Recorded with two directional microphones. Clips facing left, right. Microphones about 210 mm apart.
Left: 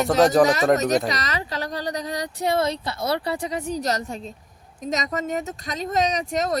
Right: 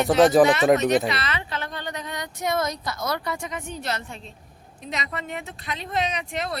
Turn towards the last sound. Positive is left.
turn(degrees=40)  # may be behind; listen again after turning